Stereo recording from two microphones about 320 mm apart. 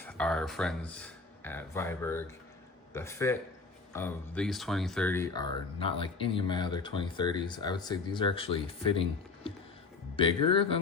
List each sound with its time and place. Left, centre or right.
0.0 s speech: centre
10.2 s speech: centre